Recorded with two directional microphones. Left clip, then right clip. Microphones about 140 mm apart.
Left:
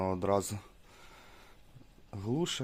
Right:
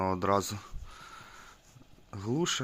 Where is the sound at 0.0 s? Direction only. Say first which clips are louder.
Right 2 dB; 10° left (ahead or behind).